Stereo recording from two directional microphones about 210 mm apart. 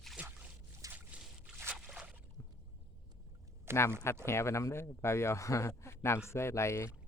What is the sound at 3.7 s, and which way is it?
Speech, 10° right (ahead or behind).